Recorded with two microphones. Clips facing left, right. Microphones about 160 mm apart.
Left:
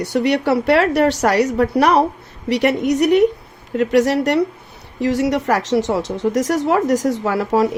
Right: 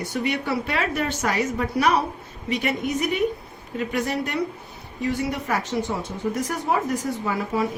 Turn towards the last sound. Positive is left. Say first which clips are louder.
# left 8 dB
turn(degrees=75)  # may be behind; listen again after turning